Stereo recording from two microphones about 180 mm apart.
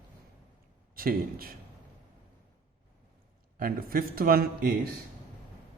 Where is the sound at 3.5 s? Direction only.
55° right (ahead or behind).